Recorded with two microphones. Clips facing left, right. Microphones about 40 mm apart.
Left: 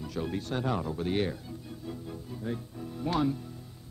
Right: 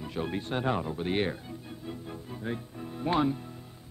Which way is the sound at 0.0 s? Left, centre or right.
Right.